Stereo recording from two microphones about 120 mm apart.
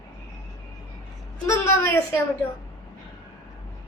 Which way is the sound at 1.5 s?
20° left (ahead or behind).